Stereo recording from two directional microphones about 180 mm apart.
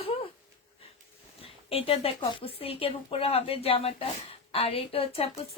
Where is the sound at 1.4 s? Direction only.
30° left (ahead or behind).